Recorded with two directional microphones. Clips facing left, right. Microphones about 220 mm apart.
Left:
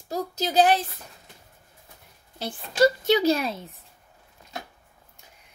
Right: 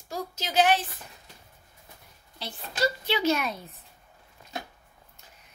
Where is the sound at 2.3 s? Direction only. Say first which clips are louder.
Left 9 dB; 50° left (ahead or behind); by 3.6 s 30° left (ahead or behind).